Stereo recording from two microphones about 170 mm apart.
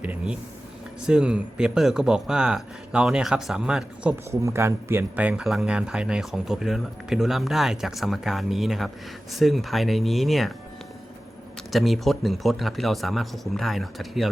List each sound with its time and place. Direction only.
0.0 s speech: 10° right (ahead or behind)
4.4 s speech: 15° right (ahead or behind); by 10.5 s centre (ahead or behind)
11.7 s speech: centre (ahead or behind)